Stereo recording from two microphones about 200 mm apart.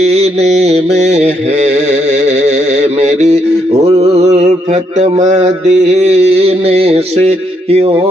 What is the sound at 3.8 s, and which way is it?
Mantra, 30° right (ahead or behind).